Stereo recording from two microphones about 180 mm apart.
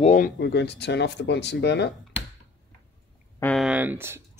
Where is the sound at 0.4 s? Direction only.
70° left (ahead or behind).